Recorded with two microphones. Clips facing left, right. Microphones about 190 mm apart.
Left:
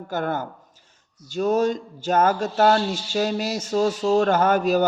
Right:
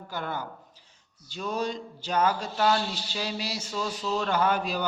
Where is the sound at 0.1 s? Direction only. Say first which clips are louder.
Left 8 dB; 50° left (ahead or behind).